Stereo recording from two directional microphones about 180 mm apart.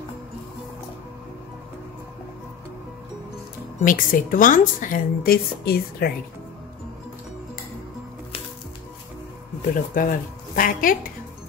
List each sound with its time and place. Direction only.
3.8 s a woman's voice: 50° left (ahead or behind)
9.9 s a woman's voice: 50° left (ahead or behind)